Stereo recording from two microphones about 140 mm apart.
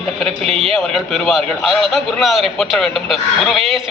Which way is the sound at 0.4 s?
45° right (ahead or behind).